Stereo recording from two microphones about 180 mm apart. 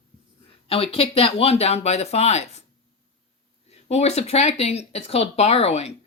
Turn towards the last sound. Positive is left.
turn(degrees=35)  # may be behind; listen again after turning